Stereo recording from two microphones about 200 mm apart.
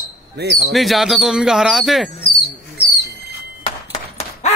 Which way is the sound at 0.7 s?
Centre (ahead or behind).